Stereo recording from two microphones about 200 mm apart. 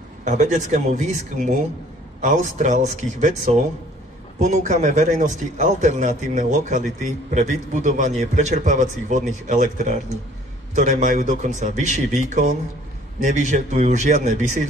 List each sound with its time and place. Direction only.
0.2 s a man's voice: 35° right (ahead or behind)
2.6 s a man's voice: 40° right (ahead or behind)
4.4 s a man's voice: 35° right (ahead or behind)